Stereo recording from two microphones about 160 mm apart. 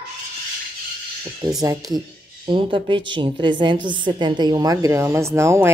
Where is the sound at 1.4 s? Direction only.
20° right (ahead or behind).